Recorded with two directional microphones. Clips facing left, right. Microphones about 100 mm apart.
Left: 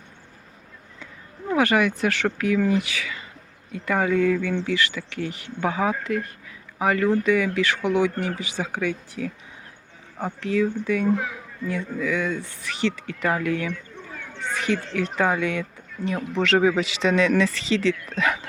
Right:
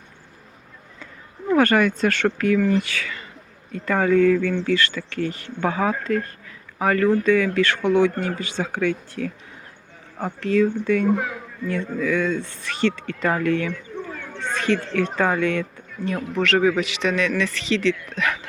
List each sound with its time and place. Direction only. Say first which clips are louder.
1.5 s speech: right 3 dB; 10° left (ahead or behind)
10.4 s speech: right 4 dB; 5° left (ahead or behind)
16.1 s speech: even; centre (ahead or behind)
16.8 s a man's voice: left 2 dB; 30° left (ahead or behind)
18.1 s dog: left 1 dB; 25° left (ahead or behind)